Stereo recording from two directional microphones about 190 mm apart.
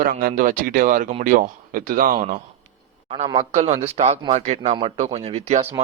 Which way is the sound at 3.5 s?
35° right (ahead or behind).